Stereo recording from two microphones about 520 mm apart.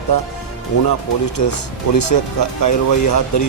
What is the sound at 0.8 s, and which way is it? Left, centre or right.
Speech, left.